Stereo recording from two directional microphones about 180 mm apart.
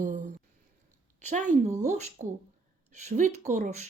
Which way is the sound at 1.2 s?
45° right (ahead or behind).